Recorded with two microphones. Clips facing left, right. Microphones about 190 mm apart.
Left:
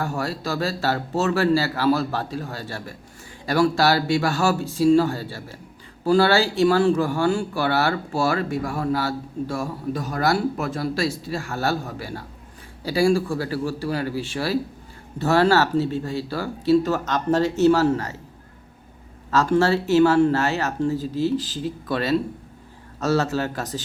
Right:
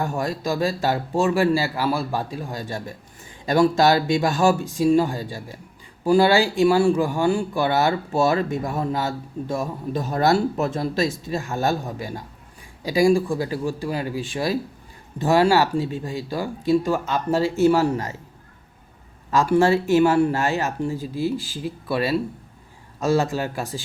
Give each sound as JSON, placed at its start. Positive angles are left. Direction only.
{"t": 0.0, "sound": "speech", "side_deg": -15}
{"t": 19.3, "sound": "speech", "side_deg": -15}